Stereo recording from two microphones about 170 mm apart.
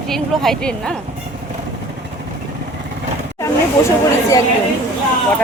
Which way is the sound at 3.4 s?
20° left (ahead or behind).